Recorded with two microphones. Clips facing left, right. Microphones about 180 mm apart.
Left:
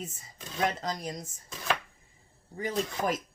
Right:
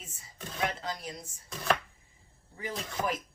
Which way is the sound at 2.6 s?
40° left (ahead or behind).